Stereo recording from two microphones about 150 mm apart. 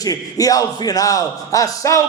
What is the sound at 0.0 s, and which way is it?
A man's voice, 25° left (ahead or behind).